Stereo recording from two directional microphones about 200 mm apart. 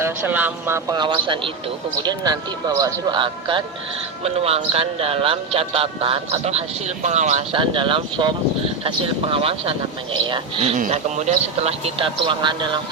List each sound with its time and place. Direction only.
0.0 s speech: 10° right (ahead or behind); by 10.8 s 25° right (ahead or behind)
10.8 s speech: 35° right (ahead or behind)